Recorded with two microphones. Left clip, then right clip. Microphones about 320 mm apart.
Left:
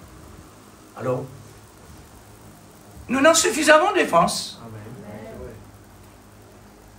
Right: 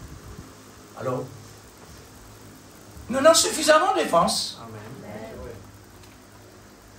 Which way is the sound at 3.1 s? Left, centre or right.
Left.